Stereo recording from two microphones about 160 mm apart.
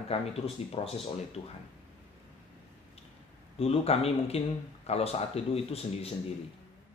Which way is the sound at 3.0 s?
40° left (ahead or behind).